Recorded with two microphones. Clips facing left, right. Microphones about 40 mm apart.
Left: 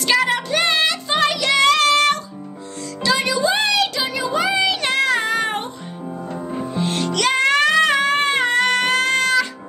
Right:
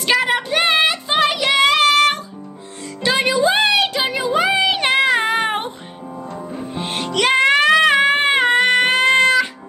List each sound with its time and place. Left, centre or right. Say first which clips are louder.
0.0 s music: right 1 dB; centre
3.0 s music: right 2 dB; right
6.7 s music: left 1 dB; right
9.0 s music: right 4 dB; right